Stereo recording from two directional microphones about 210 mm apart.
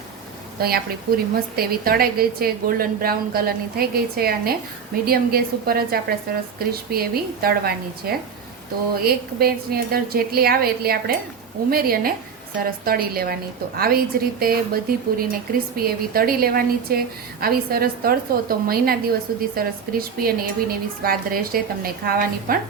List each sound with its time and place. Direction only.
0.6 s a woman's voice: 45° right (ahead or behind)